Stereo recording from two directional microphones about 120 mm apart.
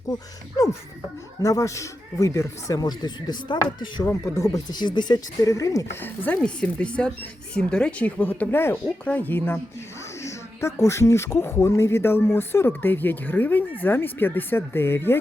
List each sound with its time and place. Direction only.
0.5 s speech: 30° left (ahead or behind)
4.0 s speech: 25° left (ahead or behind)
4.5 s speech: 35° left (ahead or behind); by 15.2 s 20° left (ahead or behind)